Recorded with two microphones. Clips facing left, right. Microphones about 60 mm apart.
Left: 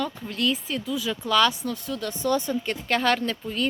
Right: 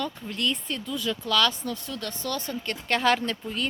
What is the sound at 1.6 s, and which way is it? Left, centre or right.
Speech, centre.